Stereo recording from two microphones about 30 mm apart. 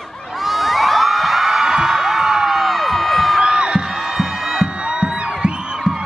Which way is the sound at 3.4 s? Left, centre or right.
Right.